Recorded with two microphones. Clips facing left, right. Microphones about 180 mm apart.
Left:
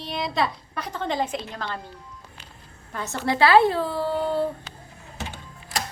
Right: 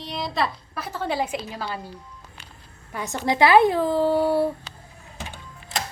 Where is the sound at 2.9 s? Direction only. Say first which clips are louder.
Right 1 dB; 15° right (ahead or behind).